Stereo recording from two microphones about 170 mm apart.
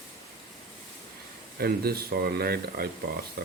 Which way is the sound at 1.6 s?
65° right (ahead or behind).